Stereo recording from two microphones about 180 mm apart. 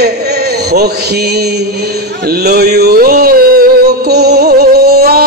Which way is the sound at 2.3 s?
60° right (ahead or behind).